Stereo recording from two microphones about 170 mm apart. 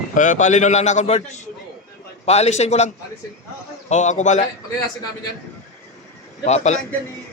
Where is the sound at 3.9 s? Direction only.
45° left (ahead or behind).